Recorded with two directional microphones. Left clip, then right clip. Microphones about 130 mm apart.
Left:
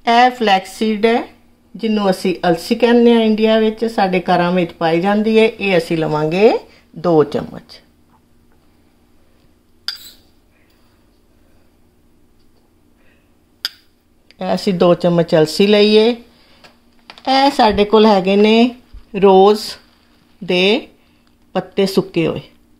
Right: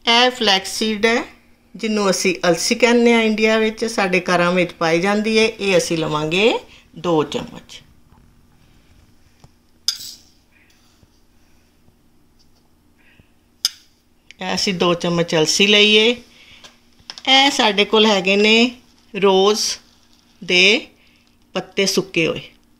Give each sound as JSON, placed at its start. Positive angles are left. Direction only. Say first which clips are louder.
{"t": 0.0, "sound": "speech", "louder": "left 3 dB", "side_deg": 45}
{"t": 6.3, "sound": "speech", "louder": "left 4 dB", "side_deg": 10}
{"t": 7.0, "sound": "speech", "louder": "left 5 dB", "side_deg": 50}
{"t": 14.2, "sound": "speech", "louder": "left 3 dB", "side_deg": 55}
{"t": 17.2, "sound": "speech", "louder": "left 2 dB", "side_deg": 50}